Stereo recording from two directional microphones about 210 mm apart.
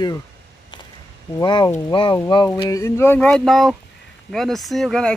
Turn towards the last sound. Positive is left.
turn(degrees=5)  # may be behind; listen again after turning